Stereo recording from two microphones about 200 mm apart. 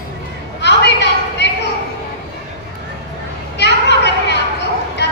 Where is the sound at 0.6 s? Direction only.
60° left (ahead or behind).